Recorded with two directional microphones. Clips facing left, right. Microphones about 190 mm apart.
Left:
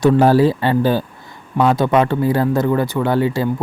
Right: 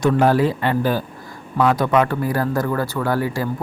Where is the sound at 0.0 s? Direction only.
30° left (ahead or behind).